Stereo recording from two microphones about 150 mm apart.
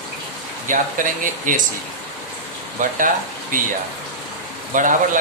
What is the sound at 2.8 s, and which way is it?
Speech, 65° right (ahead or behind).